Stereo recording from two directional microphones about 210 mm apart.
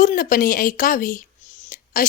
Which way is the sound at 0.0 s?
40° left (ahead or behind).